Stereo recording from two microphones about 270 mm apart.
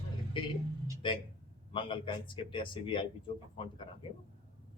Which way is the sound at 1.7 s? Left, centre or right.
Centre.